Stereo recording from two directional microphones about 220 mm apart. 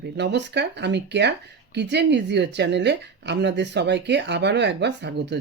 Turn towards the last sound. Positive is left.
turn(degrees=-50)  # may be behind; listen again after turning